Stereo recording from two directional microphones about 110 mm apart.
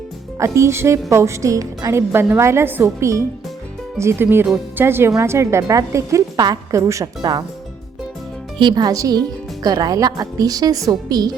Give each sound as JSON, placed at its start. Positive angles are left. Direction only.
{"t": 0.3, "sound": "a woman's voice", "side_deg": -25}
{"t": 8.5, "sound": "a woman's voice", "side_deg": -40}